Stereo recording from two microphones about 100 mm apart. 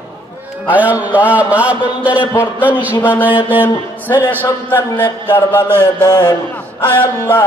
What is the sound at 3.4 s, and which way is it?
Mantra, 20° right (ahead or behind).